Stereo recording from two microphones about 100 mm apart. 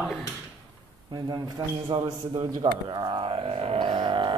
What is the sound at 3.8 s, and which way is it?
Music, 60° right (ahead or behind).